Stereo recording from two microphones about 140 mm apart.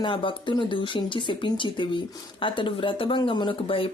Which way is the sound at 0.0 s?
35° left (ahead or behind).